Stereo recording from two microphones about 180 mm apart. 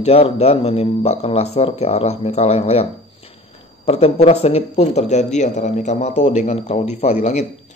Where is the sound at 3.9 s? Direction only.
35° left (ahead or behind).